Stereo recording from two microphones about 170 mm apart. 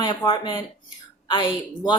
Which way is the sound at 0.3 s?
25° left (ahead or behind).